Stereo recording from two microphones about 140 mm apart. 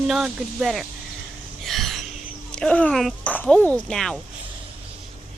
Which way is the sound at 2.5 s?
5° left (ahead or behind).